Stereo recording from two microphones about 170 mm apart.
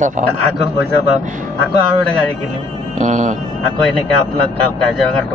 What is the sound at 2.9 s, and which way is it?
Speech, 45° right (ahead or behind).